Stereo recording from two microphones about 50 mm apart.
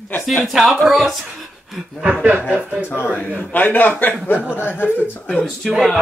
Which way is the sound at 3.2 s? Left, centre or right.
Left.